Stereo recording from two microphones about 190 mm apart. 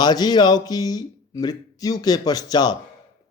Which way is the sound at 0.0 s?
20° left (ahead or behind).